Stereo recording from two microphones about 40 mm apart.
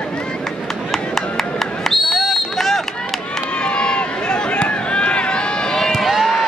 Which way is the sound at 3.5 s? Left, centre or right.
Left.